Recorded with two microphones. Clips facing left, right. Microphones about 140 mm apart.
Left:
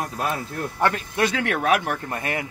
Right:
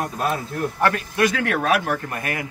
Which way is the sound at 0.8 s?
20° left (ahead or behind).